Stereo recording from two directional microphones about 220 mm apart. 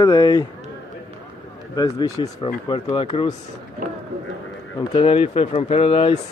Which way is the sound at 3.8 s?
40° right (ahead or behind).